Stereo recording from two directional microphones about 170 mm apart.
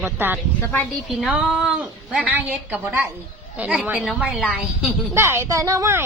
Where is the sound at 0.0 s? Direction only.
15° right (ahead or behind).